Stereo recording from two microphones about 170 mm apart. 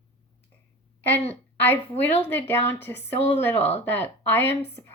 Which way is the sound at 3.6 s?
40° left (ahead or behind).